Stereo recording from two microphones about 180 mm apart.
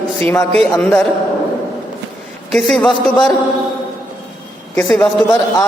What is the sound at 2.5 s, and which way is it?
Speech, 5° left (ahead or behind).